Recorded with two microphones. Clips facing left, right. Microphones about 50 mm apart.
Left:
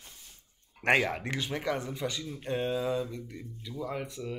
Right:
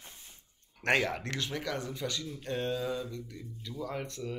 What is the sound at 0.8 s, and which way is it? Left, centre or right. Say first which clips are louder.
Speech: left 3 dB; centre.